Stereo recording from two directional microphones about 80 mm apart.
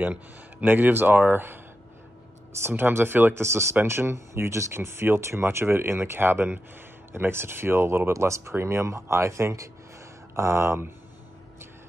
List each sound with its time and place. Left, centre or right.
0.0 s speech: centre
2.7 s speech: right